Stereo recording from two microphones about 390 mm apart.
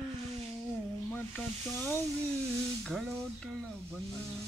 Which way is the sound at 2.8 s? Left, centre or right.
Centre.